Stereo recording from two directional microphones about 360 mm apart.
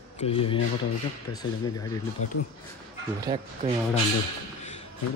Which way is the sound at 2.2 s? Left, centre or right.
Left.